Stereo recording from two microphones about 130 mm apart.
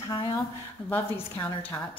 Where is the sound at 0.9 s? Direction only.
15° left (ahead or behind).